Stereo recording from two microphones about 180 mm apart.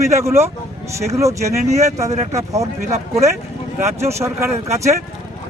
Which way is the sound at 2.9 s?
35° right (ahead or behind).